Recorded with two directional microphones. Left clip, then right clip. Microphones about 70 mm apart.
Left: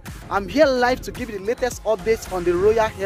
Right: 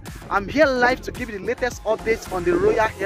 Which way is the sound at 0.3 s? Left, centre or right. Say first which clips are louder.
Left 1 dB; left.